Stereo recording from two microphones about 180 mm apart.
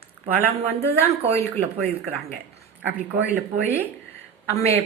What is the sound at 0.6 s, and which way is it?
Speech, 35° right (ahead or behind).